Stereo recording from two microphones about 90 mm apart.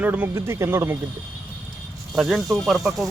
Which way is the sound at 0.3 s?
30° right (ahead or behind).